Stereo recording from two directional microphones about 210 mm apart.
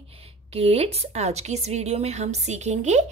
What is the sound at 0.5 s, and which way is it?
A woman's voice, 30° right (ahead or behind).